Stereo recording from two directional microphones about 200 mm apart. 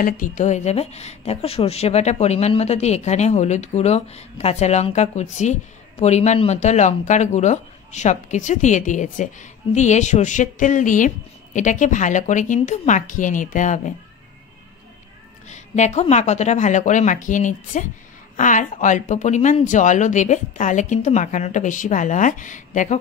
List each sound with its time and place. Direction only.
0.0 s a woman's voice: 40° left (ahead or behind)
15.4 s a woman's voice: 35° left (ahead or behind)